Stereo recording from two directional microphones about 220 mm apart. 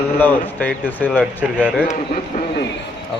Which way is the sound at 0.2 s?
10° left (ahead or behind).